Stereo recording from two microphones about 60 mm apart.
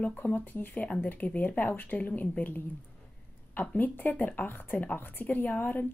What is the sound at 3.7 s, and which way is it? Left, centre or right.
A woman's voice, left.